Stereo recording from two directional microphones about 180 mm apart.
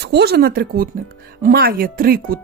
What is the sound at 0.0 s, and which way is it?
Speech, 65° right (ahead or behind).